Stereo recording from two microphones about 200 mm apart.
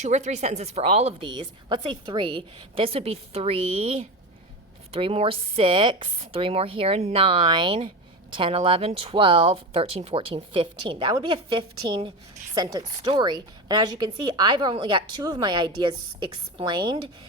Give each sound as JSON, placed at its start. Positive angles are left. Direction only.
{"t": 0.1, "sound": "speech", "side_deg": -35}